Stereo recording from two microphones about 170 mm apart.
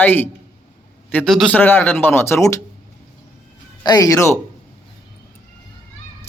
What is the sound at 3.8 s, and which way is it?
Speech, 20° left (ahead or behind).